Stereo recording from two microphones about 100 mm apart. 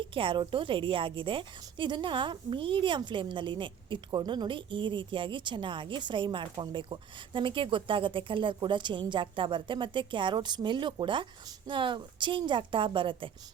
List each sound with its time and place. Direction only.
0.1 s a woman's voice: 60° right (ahead or behind)